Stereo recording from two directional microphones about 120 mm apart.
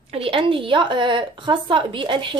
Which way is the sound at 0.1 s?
50° right (ahead or behind).